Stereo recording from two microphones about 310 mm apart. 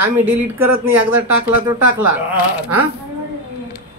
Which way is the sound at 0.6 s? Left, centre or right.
Right.